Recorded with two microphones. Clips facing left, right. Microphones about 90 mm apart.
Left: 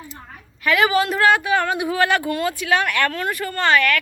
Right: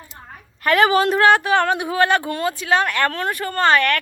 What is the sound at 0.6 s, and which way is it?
Speech, 45° right (ahead or behind).